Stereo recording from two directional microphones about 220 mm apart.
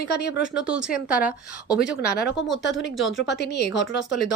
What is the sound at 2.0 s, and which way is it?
Speech, 45° left (ahead or behind).